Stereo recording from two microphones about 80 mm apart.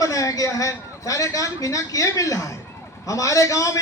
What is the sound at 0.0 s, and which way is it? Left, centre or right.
A man's voice, left.